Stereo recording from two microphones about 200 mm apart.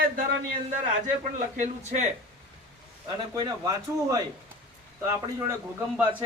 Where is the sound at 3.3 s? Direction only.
20° right (ahead or behind).